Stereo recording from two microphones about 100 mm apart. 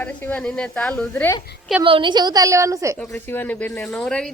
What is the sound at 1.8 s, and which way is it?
A woman's voice, 55° right (ahead or behind).